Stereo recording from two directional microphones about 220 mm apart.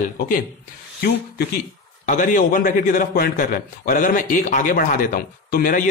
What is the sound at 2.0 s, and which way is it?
A man's voice, 35° left (ahead or behind).